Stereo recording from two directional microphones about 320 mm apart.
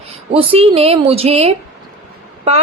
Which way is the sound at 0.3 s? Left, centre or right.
Centre.